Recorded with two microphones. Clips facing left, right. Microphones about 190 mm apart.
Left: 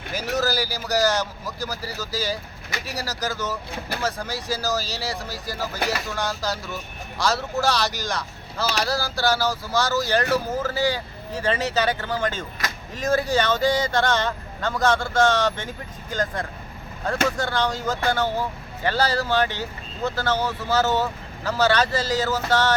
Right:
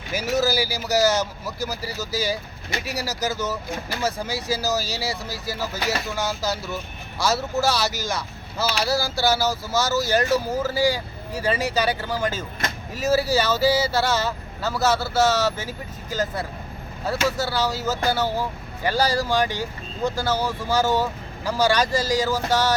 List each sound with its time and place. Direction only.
0.1 s speech: 10° right (ahead or behind)